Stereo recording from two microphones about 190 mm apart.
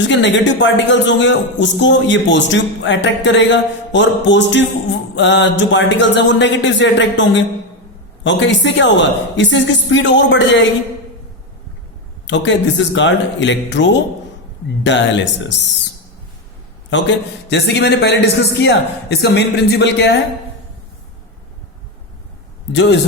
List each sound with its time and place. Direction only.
0.0 s a man's voice: 70° left (ahead or behind)
12.2 s a man's voice: 70° left (ahead or behind)
16.9 s a man's voice: 65° left (ahead or behind)
22.7 s a man's voice: 65° left (ahead or behind)